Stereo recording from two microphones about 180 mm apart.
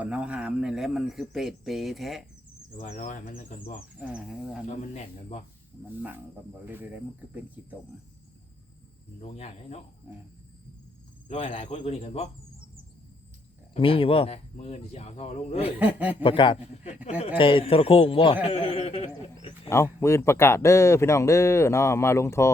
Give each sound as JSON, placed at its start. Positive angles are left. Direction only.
{"t": 0.0, "sound": "speech", "side_deg": -5}
{"t": 2.9, "sound": "speech", "side_deg": 50}
{"t": 4.0, "sound": "speech", "side_deg": -5}
{"t": 4.7, "sound": "speech", "side_deg": 40}
{"t": 6.7, "sound": "speech", "side_deg": -10}
{"t": 9.2, "sound": "speech", "side_deg": 35}
{"t": 11.3, "sound": "speech", "side_deg": 35}
{"t": 13.7, "sound": "speech", "side_deg": 30}
{"t": 15.8, "sound": "speech", "side_deg": -10}
{"t": 16.2, "sound": "a man's voice", "side_deg": 30}
{"t": 19.7, "sound": "speech", "side_deg": 15}